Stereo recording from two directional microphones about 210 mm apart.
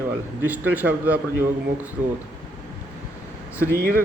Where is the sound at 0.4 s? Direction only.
10° right (ahead or behind).